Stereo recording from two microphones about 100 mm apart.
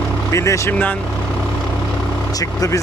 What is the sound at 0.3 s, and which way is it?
Speech, 30° left (ahead or behind).